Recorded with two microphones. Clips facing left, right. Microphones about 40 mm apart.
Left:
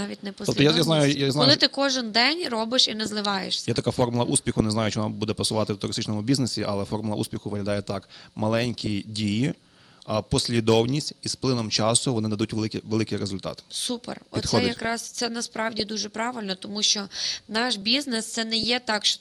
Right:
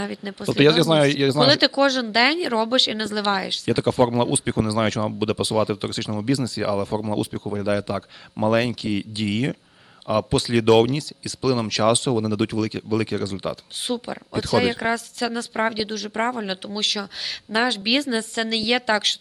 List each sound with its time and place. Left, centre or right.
0.0 s speech: right